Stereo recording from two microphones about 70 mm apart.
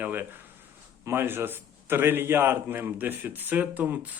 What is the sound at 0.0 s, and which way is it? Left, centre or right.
A man's voice, right.